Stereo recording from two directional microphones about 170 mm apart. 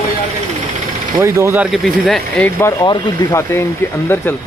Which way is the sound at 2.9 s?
25° left (ahead or behind).